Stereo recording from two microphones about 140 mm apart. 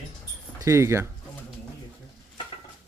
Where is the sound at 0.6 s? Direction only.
20° right (ahead or behind).